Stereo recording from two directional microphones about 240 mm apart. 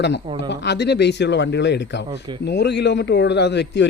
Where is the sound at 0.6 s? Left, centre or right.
Left.